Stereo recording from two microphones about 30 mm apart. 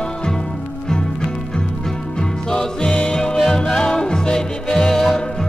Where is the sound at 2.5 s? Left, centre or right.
Left.